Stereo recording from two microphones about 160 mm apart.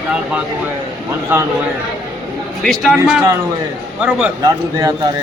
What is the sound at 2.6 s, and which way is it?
Speech, centre (ahead or behind).